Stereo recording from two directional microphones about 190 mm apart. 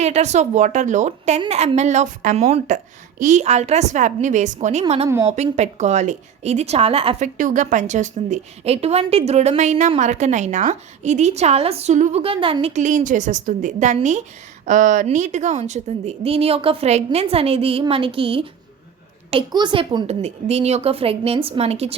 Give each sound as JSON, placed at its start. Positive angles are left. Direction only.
{"t": 0.0, "sound": "a woman's voice", "side_deg": -35}
{"t": 5.0, "sound": "a woman's voice", "side_deg": -15}
{"t": 5.4, "sound": "a woman's voice", "side_deg": -35}
{"t": 7.3, "sound": "a woman's voice", "side_deg": -40}